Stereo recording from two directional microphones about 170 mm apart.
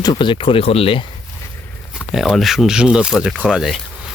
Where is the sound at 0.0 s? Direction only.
25° left (ahead or behind).